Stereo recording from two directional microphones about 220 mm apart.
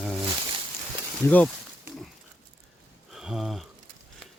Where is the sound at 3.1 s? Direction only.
Centre (ahead or behind).